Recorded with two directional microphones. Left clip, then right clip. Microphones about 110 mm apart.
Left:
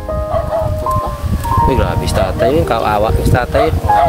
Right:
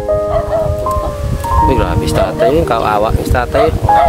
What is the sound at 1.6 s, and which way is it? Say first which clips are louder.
Speech: right 2 dB; 15° right (ahead or behind).